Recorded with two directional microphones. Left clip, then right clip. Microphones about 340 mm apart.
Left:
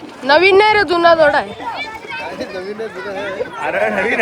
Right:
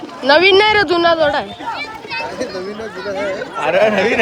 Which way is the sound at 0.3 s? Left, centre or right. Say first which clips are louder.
Even; centre.